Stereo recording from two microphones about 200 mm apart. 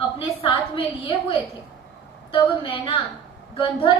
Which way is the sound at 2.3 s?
25° left (ahead or behind).